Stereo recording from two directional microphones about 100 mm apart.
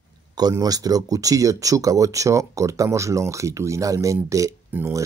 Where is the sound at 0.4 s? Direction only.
40° right (ahead or behind).